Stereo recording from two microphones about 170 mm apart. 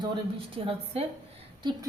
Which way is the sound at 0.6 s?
35° right (ahead or behind).